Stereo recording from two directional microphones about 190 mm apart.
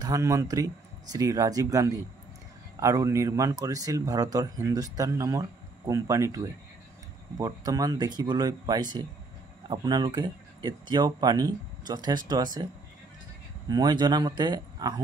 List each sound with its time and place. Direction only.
0.0 s speech: 15° right (ahead or behind)
13.7 s speech: 20° right (ahead or behind)